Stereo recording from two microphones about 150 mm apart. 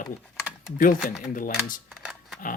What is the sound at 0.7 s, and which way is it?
Speech, 70° left (ahead or behind).